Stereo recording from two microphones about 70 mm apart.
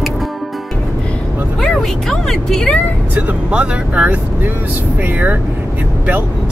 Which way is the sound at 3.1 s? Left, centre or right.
Centre.